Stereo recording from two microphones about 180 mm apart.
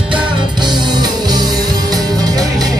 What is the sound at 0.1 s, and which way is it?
Music, 25° right (ahead or behind).